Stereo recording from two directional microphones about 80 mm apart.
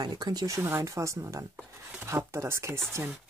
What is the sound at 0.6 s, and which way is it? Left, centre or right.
Speech, right.